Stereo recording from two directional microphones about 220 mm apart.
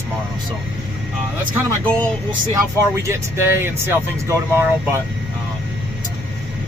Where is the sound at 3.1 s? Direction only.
10° right (ahead or behind).